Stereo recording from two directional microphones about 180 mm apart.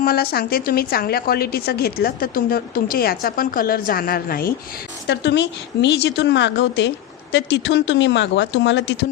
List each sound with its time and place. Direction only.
0.0 s a woman's voice: 55° left (ahead or behind)
5.0 s a woman's voice: 70° left (ahead or behind)